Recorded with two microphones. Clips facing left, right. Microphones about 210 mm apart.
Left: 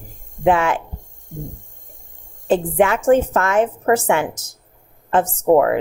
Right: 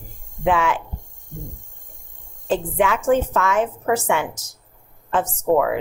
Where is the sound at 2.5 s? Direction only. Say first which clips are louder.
Left 4 dB; 50° left (ahead or behind).